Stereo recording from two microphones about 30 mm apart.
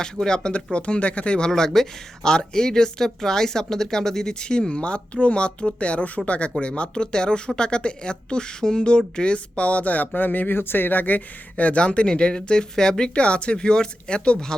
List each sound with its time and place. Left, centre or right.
0.3 s speech: left
0.5 s speech: left
1.4 s speech: left
10.2 s speech: left
11.8 s speech: left
13.1 s speech: left